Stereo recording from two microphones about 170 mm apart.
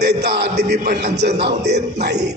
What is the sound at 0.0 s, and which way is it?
A man's voice, 75° right (ahead or behind).